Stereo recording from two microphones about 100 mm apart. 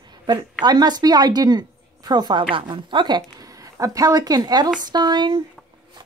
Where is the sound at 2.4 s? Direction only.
60° right (ahead or behind).